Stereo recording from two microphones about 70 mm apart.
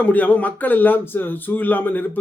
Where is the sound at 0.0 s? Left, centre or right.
Left.